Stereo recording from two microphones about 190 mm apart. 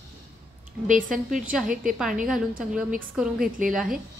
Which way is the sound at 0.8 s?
45° right (ahead or behind).